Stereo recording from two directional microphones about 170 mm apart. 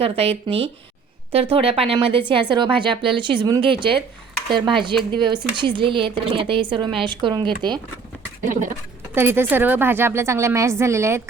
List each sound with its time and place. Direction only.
0.0 s speech: 35° right (ahead or behind)
9.1 s a woman's voice: 15° right (ahead or behind)